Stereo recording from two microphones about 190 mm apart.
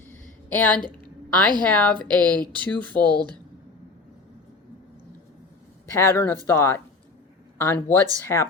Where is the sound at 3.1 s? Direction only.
20° right (ahead or behind).